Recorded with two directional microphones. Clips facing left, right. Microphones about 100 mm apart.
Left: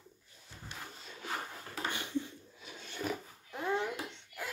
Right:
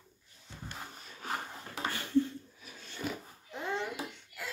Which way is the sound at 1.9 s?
15° left (ahead or behind).